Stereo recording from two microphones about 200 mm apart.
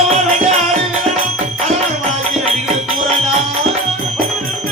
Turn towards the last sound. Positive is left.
turn(degrees=-30)  # may be behind; listen again after turning